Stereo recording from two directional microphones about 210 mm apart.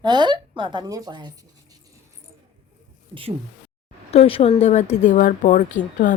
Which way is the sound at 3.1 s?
25° right (ahead or behind).